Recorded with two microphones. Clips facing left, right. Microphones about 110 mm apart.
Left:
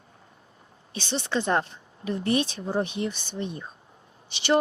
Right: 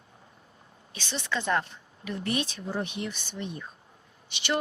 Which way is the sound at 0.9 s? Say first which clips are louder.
Left 5 dB; 30° left (ahead or behind).